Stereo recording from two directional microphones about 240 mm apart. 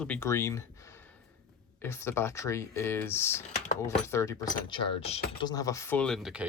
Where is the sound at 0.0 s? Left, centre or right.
Centre.